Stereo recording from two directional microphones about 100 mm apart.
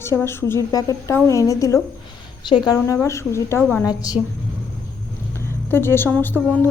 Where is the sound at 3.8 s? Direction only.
40° left (ahead or behind).